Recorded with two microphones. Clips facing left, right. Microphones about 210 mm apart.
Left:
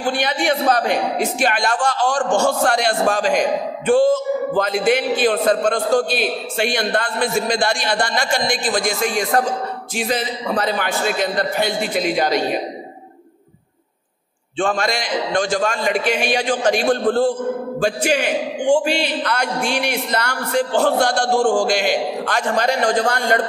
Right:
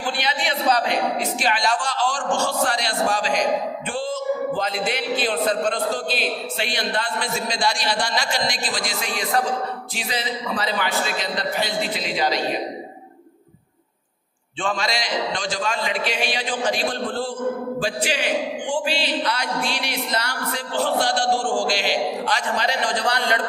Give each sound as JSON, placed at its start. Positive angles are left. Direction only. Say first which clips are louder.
{"t": 0.0, "sound": "speech", "louder": "left 6 dB", "side_deg": 50}
{"t": 14.6, "sound": "speech", "louder": "left 5 dB", "side_deg": 50}